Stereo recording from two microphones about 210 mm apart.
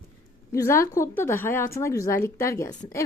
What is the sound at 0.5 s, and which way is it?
A woman's voice, 15° left (ahead or behind).